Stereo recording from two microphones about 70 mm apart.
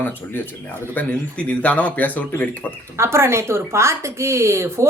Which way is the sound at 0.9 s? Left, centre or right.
Left.